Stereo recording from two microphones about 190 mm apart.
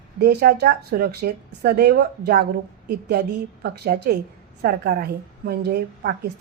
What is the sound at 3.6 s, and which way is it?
A woman's voice, 55° right (ahead or behind).